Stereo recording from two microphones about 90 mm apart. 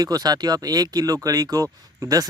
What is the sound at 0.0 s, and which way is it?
Speech, 45° right (ahead or behind).